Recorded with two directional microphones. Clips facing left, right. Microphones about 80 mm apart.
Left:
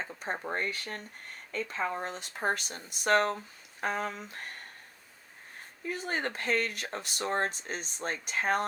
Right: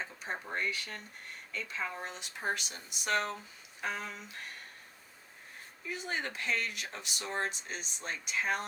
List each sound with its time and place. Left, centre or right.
0.0 s speech: left
5.9 s speech: left